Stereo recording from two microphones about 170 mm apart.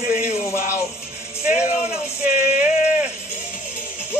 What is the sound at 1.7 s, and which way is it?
Music, 40° left (ahead or behind).